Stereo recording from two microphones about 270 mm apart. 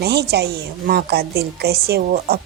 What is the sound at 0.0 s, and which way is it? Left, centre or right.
Speech, right.